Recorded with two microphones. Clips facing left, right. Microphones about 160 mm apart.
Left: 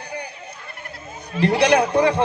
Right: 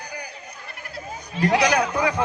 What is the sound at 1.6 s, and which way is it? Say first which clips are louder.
Speech: left 5 dB; 30° left (ahead or behind).